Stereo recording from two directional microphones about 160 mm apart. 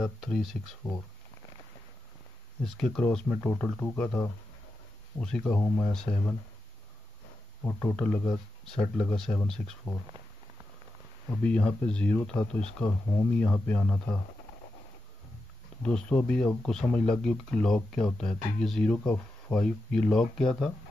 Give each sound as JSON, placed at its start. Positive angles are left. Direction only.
{"t": 0.0, "sound": "speech", "side_deg": 0}
{"t": 2.6, "sound": "speech", "side_deg": 5}
{"t": 7.6, "sound": "speech", "side_deg": 10}
{"t": 11.2, "sound": "speech", "side_deg": 10}
{"t": 15.8, "sound": "speech", "side_deg": 5}